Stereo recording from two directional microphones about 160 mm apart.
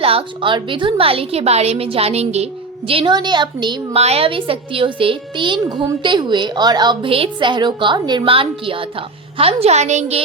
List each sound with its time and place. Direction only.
0.0 s a woman's voice: 35° right (ahead or behind)